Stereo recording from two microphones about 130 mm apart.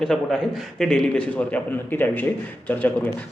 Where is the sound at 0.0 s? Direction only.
5° left (ahead or behind).